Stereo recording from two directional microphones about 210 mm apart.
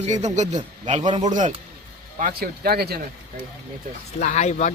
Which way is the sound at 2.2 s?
45° right (ahead or behind).